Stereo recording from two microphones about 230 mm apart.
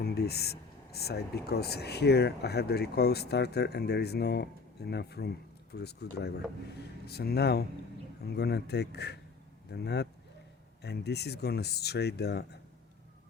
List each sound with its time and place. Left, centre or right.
0.0 s speech: left